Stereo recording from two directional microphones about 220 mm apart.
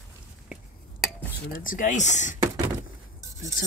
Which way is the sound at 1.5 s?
35° left (ahead or behind).